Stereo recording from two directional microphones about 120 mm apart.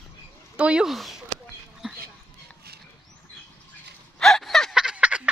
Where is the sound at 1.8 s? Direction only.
5° right (ahead or behind).